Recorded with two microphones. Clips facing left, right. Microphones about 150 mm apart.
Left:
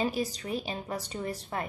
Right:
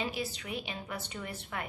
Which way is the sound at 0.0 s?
40° left (ahead or behind).